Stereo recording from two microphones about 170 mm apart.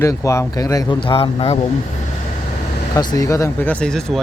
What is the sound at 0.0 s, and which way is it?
Speech, 20° left (ahead or behind).